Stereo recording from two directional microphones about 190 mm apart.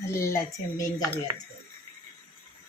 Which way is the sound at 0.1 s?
15° left (ahead or behind).